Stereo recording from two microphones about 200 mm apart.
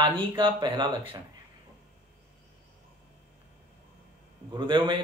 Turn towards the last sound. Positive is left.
turn(degrees=-25)  # may be behind; listen again after turning